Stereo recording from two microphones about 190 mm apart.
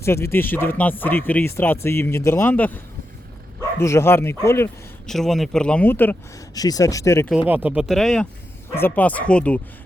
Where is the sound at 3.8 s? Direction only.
15° left (ahead or behind).